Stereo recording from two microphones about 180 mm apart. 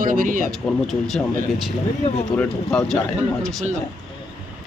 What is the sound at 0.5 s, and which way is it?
Speech, centre (ahead or behind).